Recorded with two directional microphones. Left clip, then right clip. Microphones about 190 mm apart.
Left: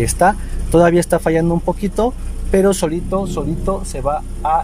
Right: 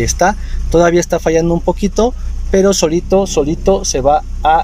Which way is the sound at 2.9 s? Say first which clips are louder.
Right 8 dB; 15° right (ahead or behind).